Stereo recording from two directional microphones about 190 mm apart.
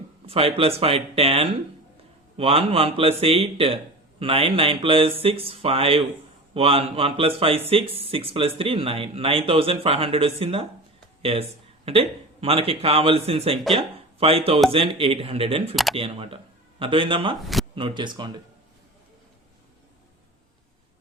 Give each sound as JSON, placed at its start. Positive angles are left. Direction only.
{"t": 0.3, "sound": "speech", "side_deg": -30}
{"t": 15.7, "sound": "speech", "side_deg": 0}
{"t": 16.0, "sound": "speech", "side_deg": -30}
{"t": 17.4, "sound": "speech", "side_deg": 0}
{"t": 17.7, "sound": "speech", "side_deg": -25}